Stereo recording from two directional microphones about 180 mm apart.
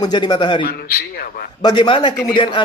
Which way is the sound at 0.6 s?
55° left (ahead or behind).